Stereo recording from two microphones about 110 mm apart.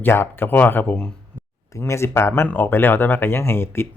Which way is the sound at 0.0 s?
20° left (ahead or behind).